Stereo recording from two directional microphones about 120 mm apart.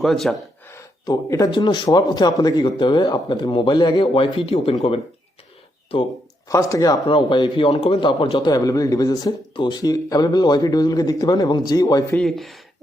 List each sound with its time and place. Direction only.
0.0 s speech: centre (ahead or behind)
0.7 s a man's voice: 25° left (ahead or behind); by 4.7 s 50° left (ahead or behind)
6.5 s speech: 25° left (ahead or behind)
7.1 s a man's voice: 40° left (ahead or behind)
12.1 s speech: 5° left (ahead or behind)